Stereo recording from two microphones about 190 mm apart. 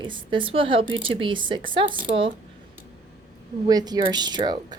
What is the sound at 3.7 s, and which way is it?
Speech, 20° right (ahead or behind).